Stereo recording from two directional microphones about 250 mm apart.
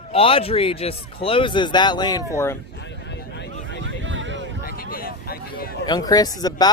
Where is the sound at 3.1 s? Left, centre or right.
Left.